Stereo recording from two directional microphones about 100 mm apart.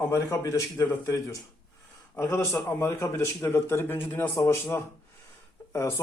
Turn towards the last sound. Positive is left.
turn(degrees=30)  # may be behind; listen again after turning